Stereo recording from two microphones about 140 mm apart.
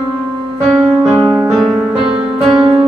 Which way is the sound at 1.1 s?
20° right (ahead or behind).